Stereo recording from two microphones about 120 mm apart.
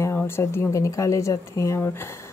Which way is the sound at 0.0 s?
20° left (ahead or behind).